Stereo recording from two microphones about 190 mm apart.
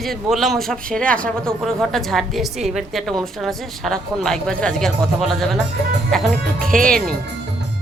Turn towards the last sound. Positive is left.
turn(degrees=5)  # may be behind; listen again after turning